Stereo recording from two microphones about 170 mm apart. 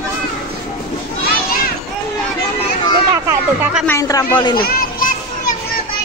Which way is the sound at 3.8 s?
15° left (ahead or behind).